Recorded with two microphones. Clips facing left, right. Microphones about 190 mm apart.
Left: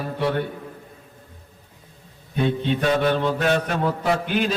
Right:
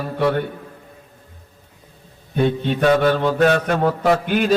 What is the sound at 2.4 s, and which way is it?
Mantra, 50° right (ahead or behind).